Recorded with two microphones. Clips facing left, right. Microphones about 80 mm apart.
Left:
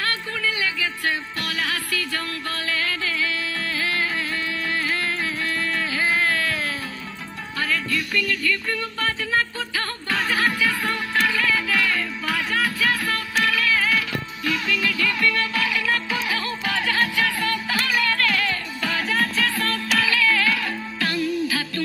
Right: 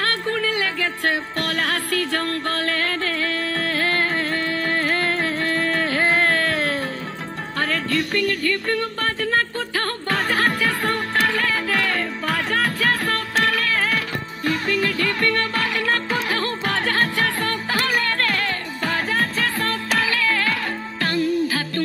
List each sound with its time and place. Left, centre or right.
0.0 s music: right